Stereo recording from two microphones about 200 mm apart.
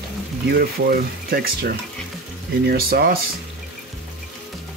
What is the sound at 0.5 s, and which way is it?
Speech, 50° right (ahead or behind).